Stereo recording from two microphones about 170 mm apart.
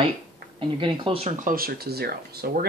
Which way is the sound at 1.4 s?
55° right (ahead or behind).